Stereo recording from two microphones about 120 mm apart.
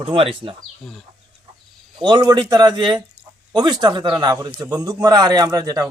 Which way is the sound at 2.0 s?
35° right (ahead or behind).